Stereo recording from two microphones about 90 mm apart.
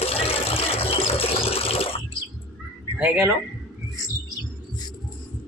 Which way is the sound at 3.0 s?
25° right (ahead or behind).